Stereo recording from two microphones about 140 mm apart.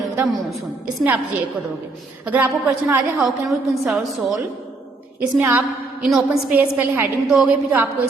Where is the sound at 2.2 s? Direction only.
10° right (ahead or behind).